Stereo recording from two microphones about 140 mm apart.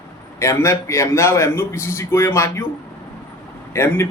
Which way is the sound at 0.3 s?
20° left (ahead or behind).